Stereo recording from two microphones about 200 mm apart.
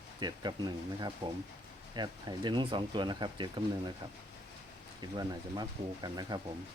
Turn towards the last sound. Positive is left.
turn(degrees=-20)  # may be behind; listen again after turning